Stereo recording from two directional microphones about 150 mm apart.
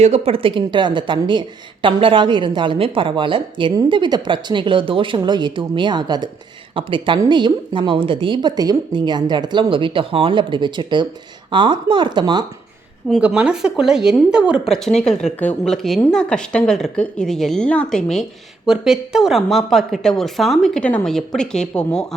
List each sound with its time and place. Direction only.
0.0 s a woman's voice: 45° right (ahead or behind)
13.1 s a woman's voice: 5° right (ahead or behind)